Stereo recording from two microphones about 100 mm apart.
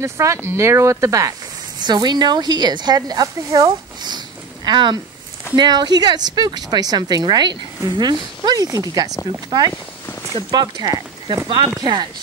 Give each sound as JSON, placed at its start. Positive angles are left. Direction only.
{"t": 0.0, "sound": "speech", "side_deg": -30}
{"t": 1.8, "sound": "a woman's voice", "side_deg": -45}